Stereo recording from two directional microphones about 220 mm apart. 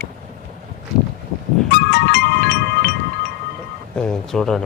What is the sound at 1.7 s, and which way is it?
Music, 50° left (ahead or behind).